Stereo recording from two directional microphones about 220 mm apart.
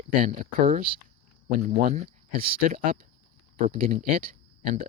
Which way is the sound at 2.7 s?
40° right (ahead or behind).